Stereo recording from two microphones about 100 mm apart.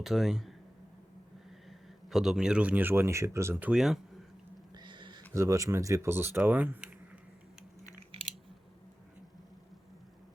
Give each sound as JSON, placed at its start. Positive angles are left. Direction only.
{"t": 0.0, "sound": "speech", "side_deg": 0}
{"t": 2.0, "sound": "speech", "side_deg": -5}
{"t": 3.7, "sound": "speech", "side_deg": -5}
{"t": 4.7, "sound": "a sound", "side_deg": -50}
{"t": 5.3, "sound": "speech", "side_deg": -30}
{"t": 8.1, "sound": "a sound", "side_deg": -75}